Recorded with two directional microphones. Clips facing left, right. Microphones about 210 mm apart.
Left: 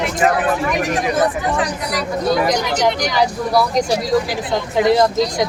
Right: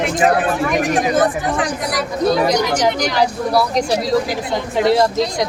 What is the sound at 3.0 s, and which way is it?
A woman's voice, centre (ahead or behind).